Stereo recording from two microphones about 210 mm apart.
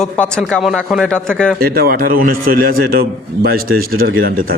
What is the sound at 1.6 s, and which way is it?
Speech, 45° right (ahead or behind).